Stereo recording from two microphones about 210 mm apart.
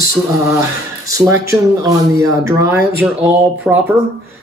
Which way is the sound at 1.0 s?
15° right (ahead or behind).